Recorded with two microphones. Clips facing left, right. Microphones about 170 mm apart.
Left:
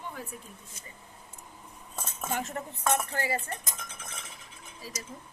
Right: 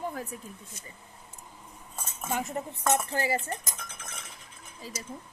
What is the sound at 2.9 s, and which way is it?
Cutlery, 25° right (ahead or behind).